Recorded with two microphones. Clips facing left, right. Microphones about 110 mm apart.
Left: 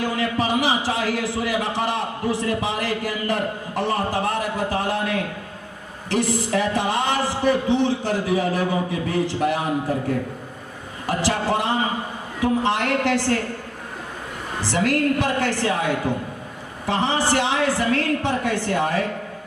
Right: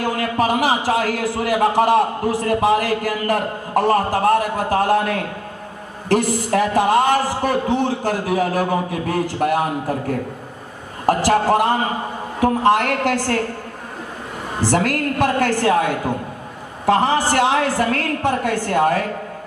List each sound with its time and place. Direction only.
0.0 s a man's voice: 50° right (ahead or behind)
14.6 s a man's voice: 45° right (ahead or behind)